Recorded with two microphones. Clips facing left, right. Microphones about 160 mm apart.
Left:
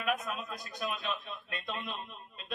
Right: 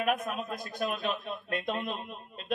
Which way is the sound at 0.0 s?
50° right (ahead or behind).